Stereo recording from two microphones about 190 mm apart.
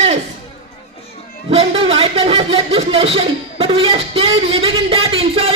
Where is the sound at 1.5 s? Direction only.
30° right (ahead or behind).